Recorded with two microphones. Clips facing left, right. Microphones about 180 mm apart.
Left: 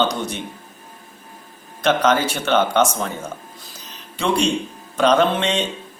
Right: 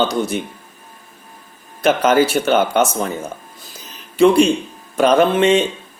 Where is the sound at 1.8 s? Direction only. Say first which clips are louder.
Right 4 dB; 10° right (ahead or behind).